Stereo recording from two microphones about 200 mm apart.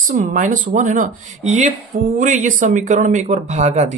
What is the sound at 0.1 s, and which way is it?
Speech, 40° right (ahead or behind).